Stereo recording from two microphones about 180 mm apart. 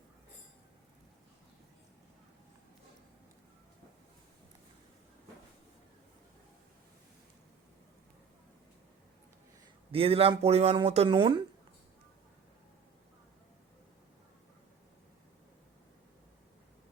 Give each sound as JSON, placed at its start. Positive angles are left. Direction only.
{"t": 9.9, "sound": "speech", "side_deg": -30}